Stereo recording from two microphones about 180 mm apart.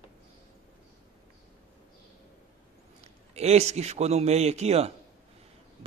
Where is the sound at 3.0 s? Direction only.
35° right (ahead or behind).